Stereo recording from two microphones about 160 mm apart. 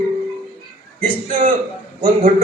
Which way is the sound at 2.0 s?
55° right (ahead or behind).